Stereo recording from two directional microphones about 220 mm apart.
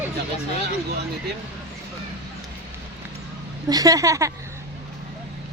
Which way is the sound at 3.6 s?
15° right (ahead or behind).